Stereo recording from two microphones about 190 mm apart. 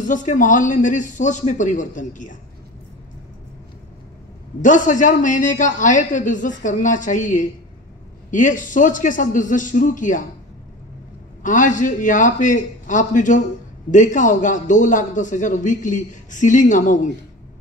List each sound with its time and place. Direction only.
0.0 s a man's voice: 40° left (ahead or behind)
4.6 s a man's voice: 40° left (ahead or behind)
11.4 s a man's voice: 40° left (ahead or behind)